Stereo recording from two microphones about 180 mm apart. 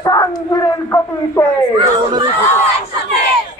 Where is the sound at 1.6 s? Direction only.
20° right (ahead or behind).